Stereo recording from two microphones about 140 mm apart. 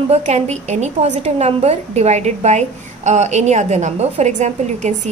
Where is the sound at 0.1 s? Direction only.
50° right (ahead or behind).